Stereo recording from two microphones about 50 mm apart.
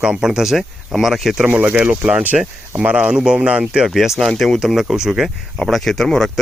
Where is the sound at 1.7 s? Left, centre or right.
Right; by 4.1 s centre.